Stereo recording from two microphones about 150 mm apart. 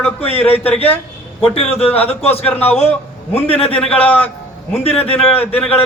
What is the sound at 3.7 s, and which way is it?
Speech, 10° left (ahead or behind).